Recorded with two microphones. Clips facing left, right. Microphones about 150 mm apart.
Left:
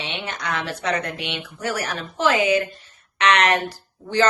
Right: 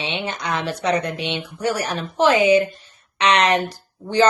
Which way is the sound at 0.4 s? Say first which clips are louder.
Right 3 dB; 25° right (ahead or behind).